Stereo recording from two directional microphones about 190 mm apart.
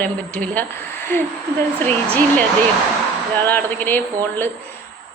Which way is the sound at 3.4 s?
10° left (ahead or behind).